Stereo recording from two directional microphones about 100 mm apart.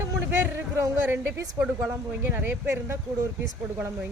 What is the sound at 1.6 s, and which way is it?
Speech, 35° right (ahead or behind).